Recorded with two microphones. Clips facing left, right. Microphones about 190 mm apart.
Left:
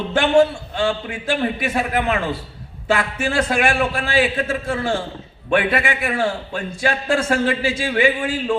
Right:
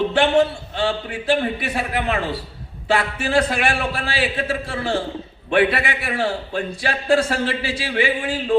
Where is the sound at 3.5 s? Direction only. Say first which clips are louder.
Left 3 dB; 45° left (ahead or behind).